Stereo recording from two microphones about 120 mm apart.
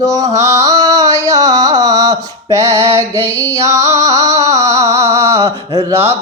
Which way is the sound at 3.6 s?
25° right (ahead or behind).